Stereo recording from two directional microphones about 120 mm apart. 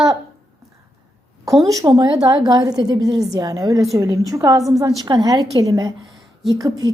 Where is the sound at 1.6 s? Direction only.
30° right (ahead or behind).